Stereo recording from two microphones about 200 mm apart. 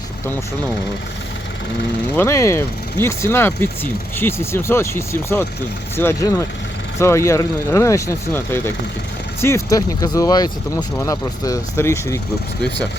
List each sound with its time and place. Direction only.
2.1 s speech: 15° left (ahead or behind)